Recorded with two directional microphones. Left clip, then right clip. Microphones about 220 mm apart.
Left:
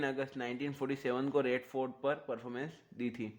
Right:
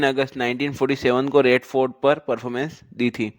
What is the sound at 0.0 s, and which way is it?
A man's voice, 45° right (ahead or behind).